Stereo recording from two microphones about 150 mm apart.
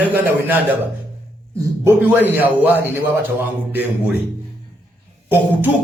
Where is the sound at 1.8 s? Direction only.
10° right (ahead or behind).